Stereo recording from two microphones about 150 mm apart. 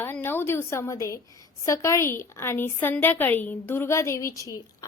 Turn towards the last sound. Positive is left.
turn(degrees=25)  # may be behind; listen again after turning